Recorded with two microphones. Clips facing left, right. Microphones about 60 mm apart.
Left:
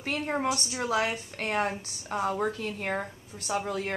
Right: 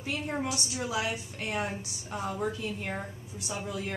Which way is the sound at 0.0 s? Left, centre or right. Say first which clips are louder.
Left 4 dB; left.